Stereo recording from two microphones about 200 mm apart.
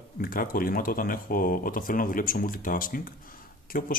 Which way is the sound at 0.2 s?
45° left (ahead or behind).